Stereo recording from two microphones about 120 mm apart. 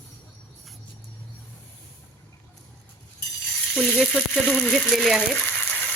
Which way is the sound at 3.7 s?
Centre (ahead or behind).